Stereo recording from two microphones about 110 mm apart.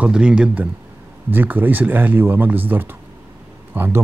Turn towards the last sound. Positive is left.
turn(degrees=-20)  # may be behind; listen again after turning